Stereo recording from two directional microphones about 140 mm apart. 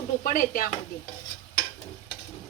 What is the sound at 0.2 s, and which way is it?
Dishes, 75° left (ahead or behind).